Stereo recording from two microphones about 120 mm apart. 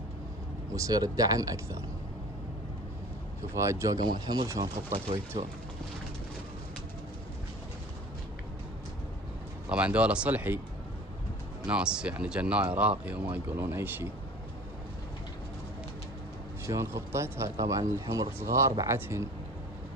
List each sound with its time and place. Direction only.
0.7 s speech: 30° right (ahead or behind)
3.5 s speech: 25° right (ahead or behind); by 5.5 s 40° right (ahead or behind)
9.6 s speech: 10° right (ahead or behind)
11.6 s speech: 5° right (ahead or behind)
16.6 s speech: 25° right (ahead or behind)